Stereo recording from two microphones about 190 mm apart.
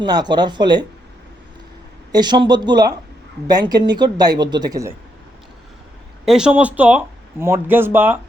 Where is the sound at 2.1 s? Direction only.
20° right (ahead or behind).